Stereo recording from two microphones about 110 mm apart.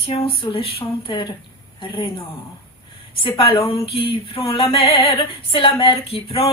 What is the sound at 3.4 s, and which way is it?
A woman's voice, 55° left (ahead or behind).